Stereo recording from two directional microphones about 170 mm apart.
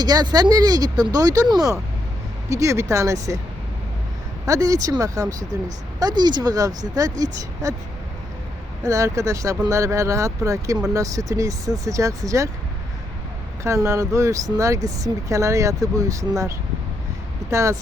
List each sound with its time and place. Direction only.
0.0 s speech: 25° right (ahead or behind)
4.4 s speech: 20° right (ahead or behind)
8.8 s speech: 20° right (ahead or behind)
13.7 s speech: 15° right (ahead or behind)
17.5 s speech: 20° right (ahead or behind)